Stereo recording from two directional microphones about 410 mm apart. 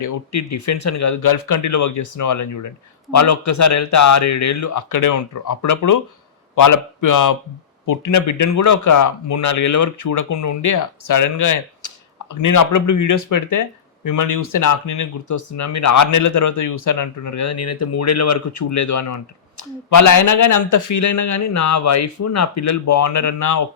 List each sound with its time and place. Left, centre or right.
0.0 s speech: left